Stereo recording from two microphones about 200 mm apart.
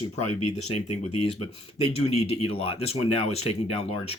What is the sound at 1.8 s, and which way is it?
Speech, 30° left (ahead or behind).